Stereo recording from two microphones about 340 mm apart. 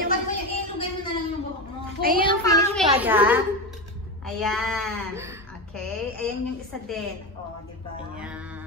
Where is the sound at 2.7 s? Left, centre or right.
Centre.